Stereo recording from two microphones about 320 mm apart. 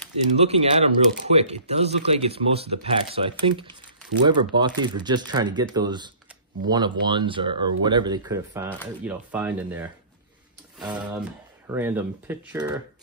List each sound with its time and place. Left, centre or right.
0.4 s speech: centre